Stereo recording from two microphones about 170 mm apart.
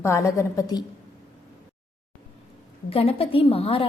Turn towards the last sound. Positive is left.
turn(degrees=35)  # may be behind; listen again after turning